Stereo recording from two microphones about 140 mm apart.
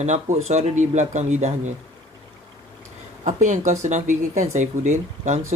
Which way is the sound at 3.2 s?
60° right (ahead or behind).